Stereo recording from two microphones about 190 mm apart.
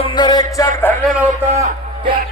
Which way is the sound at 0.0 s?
25° left (ahead or behind).